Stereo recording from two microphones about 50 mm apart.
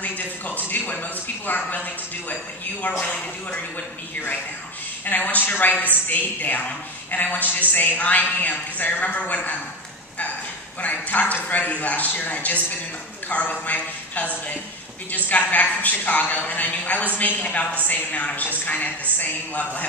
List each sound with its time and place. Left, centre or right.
0.5 s a woman's voice: left
5.0 s a woman's voice: left
10.8 s a woman's voice: left